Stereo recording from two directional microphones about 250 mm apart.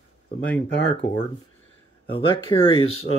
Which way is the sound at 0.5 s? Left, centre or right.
Centre.